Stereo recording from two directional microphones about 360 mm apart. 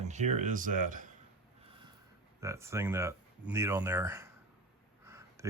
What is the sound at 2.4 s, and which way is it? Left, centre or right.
Speech, centre.